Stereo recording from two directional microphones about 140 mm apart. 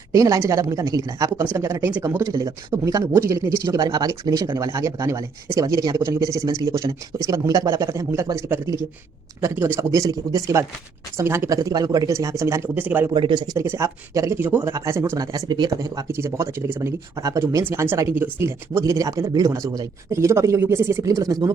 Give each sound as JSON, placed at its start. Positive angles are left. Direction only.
{"t": 0.1, "sound": "speech", "side_deg": -25}
{"t": 13.1, "sound": "speech", "side_deg": -35}
{"t": 13.6, "sound": "speech", "side_deg": -20}